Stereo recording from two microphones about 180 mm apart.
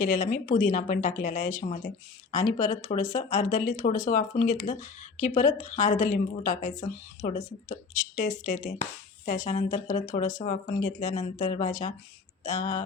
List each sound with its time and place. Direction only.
0.0 s speech: 45° left (ahead or behind)